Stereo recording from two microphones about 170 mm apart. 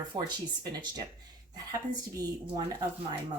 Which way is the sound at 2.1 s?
20° right (ahead or behind).